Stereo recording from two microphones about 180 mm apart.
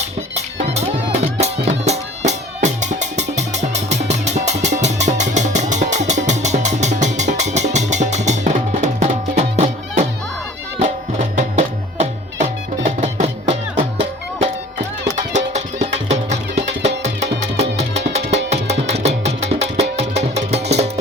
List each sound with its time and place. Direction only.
0.3 s music: 35° right (ahead or behind)